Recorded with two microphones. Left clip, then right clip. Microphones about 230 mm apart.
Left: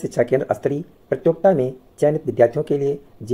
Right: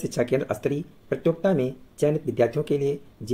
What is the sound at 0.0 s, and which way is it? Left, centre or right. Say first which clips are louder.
Speech: left 6 dB; centre.